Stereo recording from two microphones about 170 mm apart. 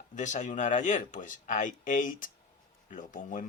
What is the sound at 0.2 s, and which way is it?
Speech, 45° left (ahead or behind).